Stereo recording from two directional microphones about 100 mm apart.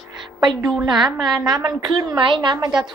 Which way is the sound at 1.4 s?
45° right (ahead or behind).